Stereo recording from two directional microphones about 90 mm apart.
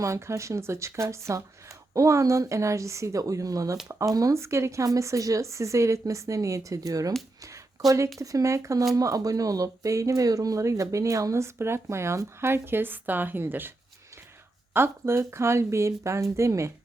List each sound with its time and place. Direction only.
0.0 s speech: 35° right (ahead or behind)